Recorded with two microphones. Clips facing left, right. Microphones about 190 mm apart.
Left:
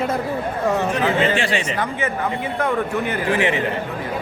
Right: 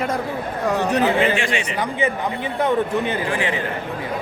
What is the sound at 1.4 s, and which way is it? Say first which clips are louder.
Speech: left 2 dB; 35° left (ahead or behind).